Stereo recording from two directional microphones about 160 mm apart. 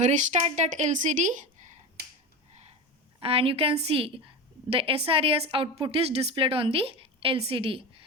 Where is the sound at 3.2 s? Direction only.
35° right (ahead or behind).